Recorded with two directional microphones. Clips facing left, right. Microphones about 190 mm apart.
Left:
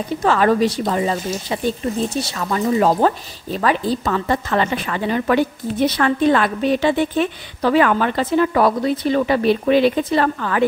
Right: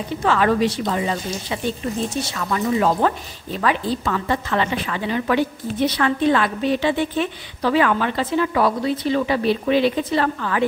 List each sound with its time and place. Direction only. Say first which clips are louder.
0.2 s a woman's voice: left 2 dB; 40° left (ahead or behind)